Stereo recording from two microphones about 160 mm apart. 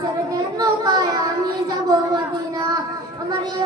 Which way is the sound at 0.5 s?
25° right (ahead or behind).